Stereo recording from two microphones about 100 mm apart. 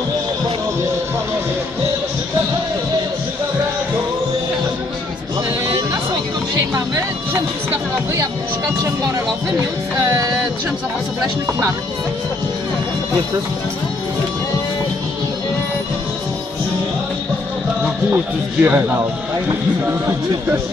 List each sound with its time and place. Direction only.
7.7 s speech: 30° right (ahead or behind)
10.0 s music: 35° right (ahead or behind)
18.1 s speech: 20° right (ahead or behind)